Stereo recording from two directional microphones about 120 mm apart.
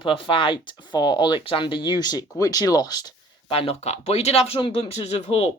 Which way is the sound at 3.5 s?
55° left (ahead or behind).